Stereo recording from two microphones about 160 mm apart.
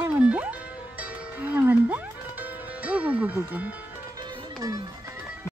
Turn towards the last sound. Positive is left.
turn(degrees=-25)  # may be behind; listen again after turning